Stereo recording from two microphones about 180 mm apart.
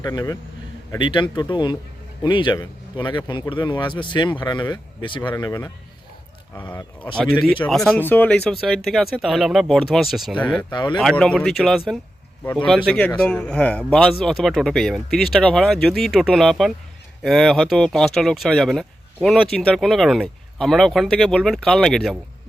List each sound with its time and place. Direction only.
0.0 s speech: 20° left (ahead or behind)
7.9 s speech: 10° left (ahead or behind)
10.6 s speech: 25° left (ahead or behind)
10.9 s speech: 5° left (ahead or behind)